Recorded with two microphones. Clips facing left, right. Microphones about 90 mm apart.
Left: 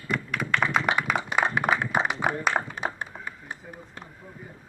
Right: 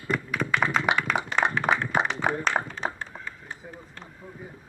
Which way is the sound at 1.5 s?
15° left (ahead or behind).